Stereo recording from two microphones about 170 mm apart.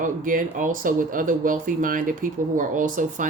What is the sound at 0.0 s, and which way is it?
Speech, 50° right (ahead or behind).